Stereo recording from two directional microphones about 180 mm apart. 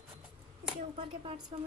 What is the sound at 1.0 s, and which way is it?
Speech, 30° right (ahead or behind).